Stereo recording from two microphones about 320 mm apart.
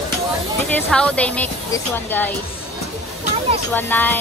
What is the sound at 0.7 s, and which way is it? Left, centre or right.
Speech, centre.